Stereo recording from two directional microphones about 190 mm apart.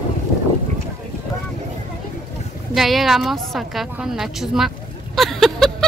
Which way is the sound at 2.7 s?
Centre (ahead or behind).